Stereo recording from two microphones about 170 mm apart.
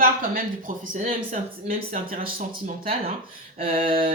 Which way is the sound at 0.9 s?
45° right (ahead or behind).